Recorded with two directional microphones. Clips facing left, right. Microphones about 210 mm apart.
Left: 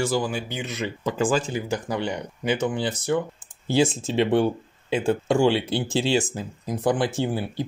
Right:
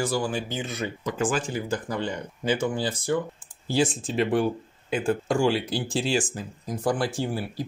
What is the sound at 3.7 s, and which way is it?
Speech, 25° left (ahead or behind).